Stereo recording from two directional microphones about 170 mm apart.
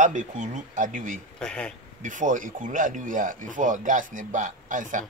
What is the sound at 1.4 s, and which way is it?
Speech, 5° left (ahead or behind).